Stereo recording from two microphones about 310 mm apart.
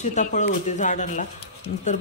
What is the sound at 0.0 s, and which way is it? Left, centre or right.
A man's voice, left.